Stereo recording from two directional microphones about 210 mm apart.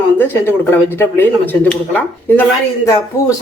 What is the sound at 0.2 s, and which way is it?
Speech, 10° left (ahead or behind).